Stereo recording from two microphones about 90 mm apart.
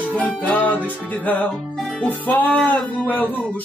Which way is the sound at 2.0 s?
15° left (ahead or behind).